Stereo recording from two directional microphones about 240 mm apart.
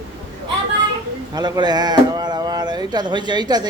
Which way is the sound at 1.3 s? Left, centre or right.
Centre.